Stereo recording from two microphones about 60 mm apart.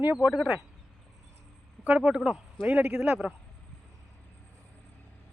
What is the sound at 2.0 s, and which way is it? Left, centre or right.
A man's voice, centre.